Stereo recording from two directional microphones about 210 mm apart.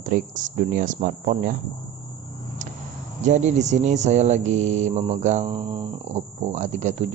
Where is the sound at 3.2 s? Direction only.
35° right (ahead or behind).